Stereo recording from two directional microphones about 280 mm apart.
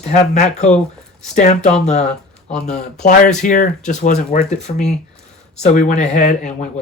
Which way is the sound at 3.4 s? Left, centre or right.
Left.